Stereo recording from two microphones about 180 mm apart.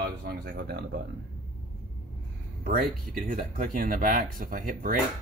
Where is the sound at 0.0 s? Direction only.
65° right (ahead or behind).